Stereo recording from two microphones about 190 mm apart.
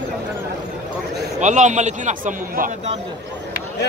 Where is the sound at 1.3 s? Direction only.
40° right (ahead or behind).